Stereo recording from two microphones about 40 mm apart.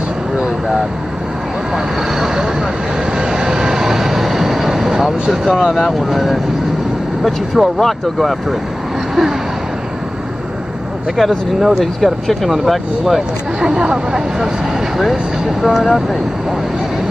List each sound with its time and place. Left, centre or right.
2.1 s speech: centre
3.2 s vehicle: centre
5.3 s speech: centre
11.1 s speech: centre
13.6 s speech: centre
15.6 s speech: centre